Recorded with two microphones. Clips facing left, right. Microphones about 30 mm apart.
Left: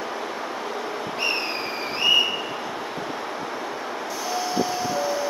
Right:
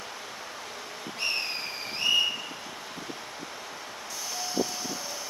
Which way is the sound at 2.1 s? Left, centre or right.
Left.